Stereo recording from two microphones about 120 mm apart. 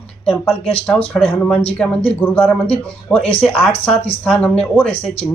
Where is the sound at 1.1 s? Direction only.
5° left (ahead or behind).